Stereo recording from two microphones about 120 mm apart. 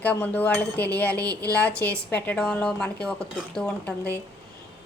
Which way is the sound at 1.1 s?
30° right (ahead or behind).